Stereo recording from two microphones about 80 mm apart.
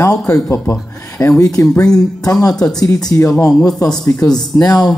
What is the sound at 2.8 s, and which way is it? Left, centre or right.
Speech, left.